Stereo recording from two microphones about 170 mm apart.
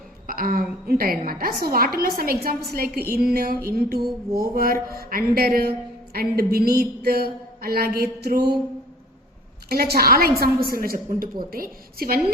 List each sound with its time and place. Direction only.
0.3 s a woman's voice: 55° right (ahead or behind)
9.6 s a woman's voice: 65° right (ahead or behind)